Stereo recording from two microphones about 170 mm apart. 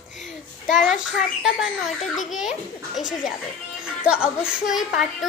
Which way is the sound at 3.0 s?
50° left (ahead or behind).